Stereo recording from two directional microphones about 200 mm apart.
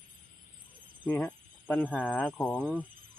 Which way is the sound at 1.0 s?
5° left (ahead or behind).